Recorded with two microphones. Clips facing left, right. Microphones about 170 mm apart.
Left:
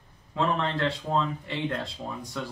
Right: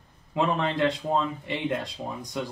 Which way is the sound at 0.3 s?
15° right (ahead or behind).